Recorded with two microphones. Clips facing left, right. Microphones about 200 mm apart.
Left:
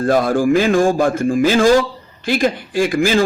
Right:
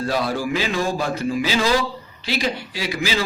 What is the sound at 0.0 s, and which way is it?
Speech, 50° left (ahead or behind).